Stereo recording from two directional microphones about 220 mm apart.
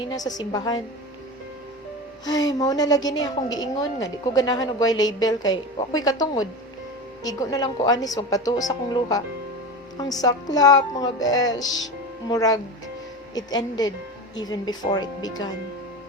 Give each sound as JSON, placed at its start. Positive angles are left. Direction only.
{"t": 0.1, "sound": "a woman's voice", "side_deg": 15}
{"t": 2.2, "sound": "a woman's voice", "side_deg": 15}